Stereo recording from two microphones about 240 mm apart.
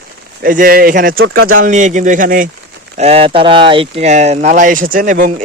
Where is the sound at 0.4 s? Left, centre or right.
Right.